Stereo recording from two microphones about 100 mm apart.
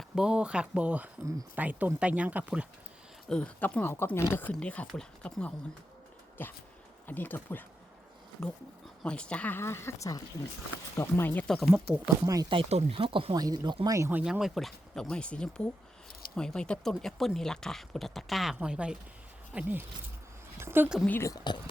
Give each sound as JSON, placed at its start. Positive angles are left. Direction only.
{"t": 0.2, "sound": "speech", "side_deg": -10}
{"t": 3.2, "sound": "speech", "side_deg": 10}
{"t": 8.4, "sound": "speech", "side_deg": 5}
{"t": 9.6, "sound": "speech", "side_deg": 25}
{"t": 11.4, "sound": "speech", "side_deg": 5}
{"t": 12.2, "sound": "speech", "side_deg": -35}
{"t": 12.5, "sound": "speech", "side_deg": -75}
{"t": 13.3, "sound": "speech", "side_deg": -40}
{"t": 14.3, "sound": "speech", "side_deg": -5}
{"t": 21.1, "sound": "speech", "side_deg": 25}
{"t": 21.3, "sound": "speech", "side_deg": 45}